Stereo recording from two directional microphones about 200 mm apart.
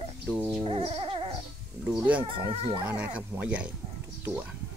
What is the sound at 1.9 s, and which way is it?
Speech, 5° right (ahead or behind).